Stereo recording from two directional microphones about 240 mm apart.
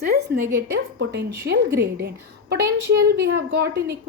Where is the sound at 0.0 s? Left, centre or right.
Right.